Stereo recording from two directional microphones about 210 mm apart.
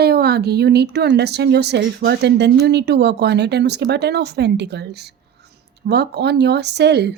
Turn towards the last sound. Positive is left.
turn(degrees=-50)  # may be behind; listen again after turning